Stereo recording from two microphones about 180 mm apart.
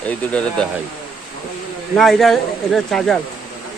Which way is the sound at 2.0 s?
Centre (ahead or behind).